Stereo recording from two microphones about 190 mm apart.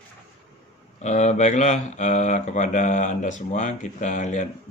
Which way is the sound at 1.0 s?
35° left (ahead or behind).